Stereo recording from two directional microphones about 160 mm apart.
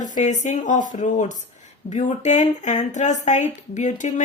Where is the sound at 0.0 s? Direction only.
50° left (ahead or behind).